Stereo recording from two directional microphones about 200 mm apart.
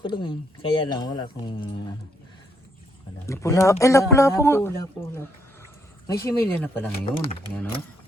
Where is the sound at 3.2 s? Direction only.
15° left (ahead or behind).